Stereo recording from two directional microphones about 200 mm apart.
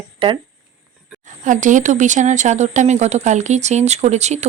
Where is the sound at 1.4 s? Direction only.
40° right (ahead or behind).